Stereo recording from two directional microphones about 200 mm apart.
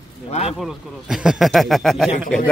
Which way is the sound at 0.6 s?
Centre (ahead or behind).